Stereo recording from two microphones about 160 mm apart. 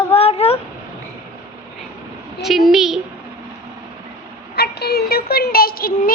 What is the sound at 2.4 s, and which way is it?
Speech, centre (ahead or behind).